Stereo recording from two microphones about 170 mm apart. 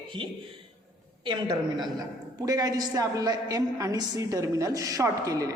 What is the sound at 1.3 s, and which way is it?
A woman's voice, 25° right (ahead or behind).